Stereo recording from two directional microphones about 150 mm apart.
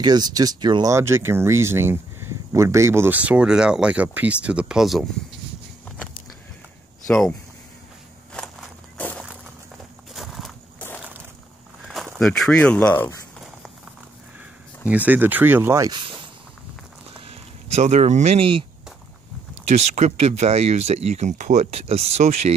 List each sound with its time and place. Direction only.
0.0 s speech: 30° right (ahead or behind); by 5.0 s centre (ahead or behind)
7.1 s speech: 5° left (ahead or behind)
8.3 s walk: 5° left (ahead or behind)
10.1 s walk: centre (ahead or behind)
11.0 s a sound: 10° right (ahead or behind)
12.2 s speech: 5° left (ahead or behind)
14.9 s speech: 10° right (ahead or behind)
15.9 s a sound: 35° right (ahead or behind)
17.3 s speech: 45° right (ahead or behind)
19.7 s speech: 45° right (ahead or behind)